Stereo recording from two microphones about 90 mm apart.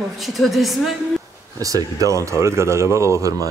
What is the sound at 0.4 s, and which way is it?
Speech, centre (ahead or behind).